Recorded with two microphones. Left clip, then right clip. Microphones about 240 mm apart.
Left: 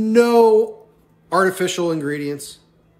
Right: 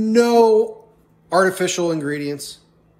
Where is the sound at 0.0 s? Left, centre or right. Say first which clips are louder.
Left 1 dB; centre.